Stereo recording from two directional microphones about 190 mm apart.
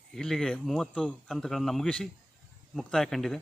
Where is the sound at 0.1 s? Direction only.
Centre (ahead or behind).